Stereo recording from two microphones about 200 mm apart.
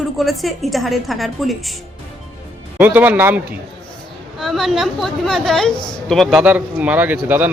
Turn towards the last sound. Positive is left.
turn(degrees=-10)  # may be behind; listen again after turning